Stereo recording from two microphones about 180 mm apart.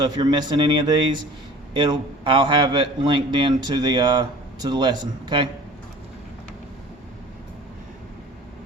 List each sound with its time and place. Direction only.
0.0 s a man's voice: 25° right (ahead or behind)